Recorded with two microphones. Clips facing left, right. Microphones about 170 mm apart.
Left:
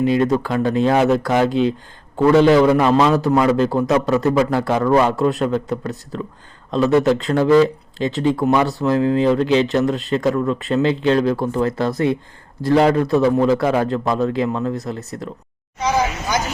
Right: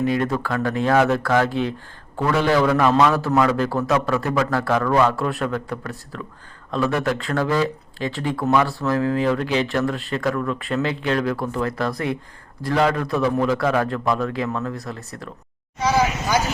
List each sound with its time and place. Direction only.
0.0 s speech: 20° left (ahead or behind)